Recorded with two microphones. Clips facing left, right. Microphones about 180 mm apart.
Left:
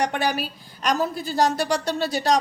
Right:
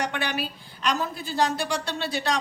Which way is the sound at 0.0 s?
40° left (ahead or behind).